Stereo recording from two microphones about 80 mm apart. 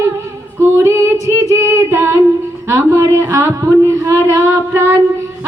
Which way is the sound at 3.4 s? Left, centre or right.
Right.